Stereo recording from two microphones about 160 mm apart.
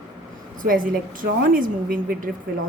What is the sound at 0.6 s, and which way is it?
A woman's voice, 60° right (ahead or behind).